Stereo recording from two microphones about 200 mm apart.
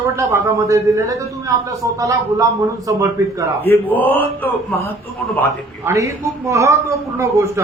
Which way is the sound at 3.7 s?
10° left (ahead or behind).